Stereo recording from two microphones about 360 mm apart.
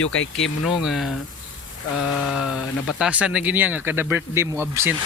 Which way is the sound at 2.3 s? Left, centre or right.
Centre.